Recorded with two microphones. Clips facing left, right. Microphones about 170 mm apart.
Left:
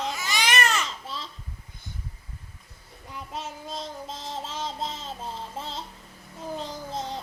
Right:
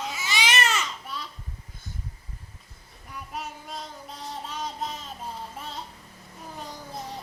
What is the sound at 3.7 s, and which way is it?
Child singing, 90° left.